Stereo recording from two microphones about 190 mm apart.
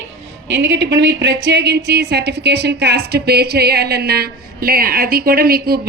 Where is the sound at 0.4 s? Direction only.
65° right (ahead or behind).